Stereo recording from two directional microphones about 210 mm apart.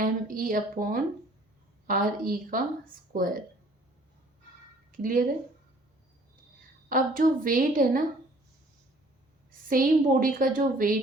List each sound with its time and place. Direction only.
0.0 s a woman's voice: 40° right (ahead or behind)
4.9 s a woman's voice: 40° right (ahead or behind)
6.8 s a woman's voice: 40° right (ahead or behind)
9.6 s a woman's voice: 40° right (ahead or behind)